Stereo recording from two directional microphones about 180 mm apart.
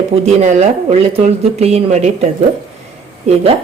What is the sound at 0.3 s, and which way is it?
Speech, 40° right (ahead or behind).